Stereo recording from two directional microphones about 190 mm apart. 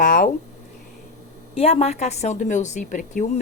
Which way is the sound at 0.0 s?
45° left (ahead or behind).